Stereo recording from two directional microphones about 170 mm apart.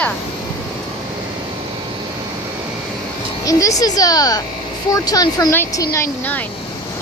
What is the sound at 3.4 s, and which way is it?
Speech, 20° left (ahead or behind).